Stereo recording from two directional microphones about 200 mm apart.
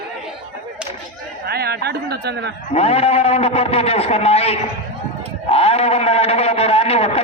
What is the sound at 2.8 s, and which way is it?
A man's voice, 30° left (ahead or behind).